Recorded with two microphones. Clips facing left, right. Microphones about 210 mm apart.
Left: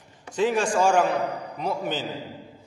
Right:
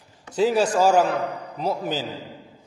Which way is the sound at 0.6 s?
35° right (ahead or behind).